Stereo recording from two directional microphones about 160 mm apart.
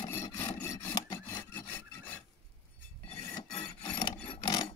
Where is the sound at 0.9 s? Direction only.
25° left (ahead or behind).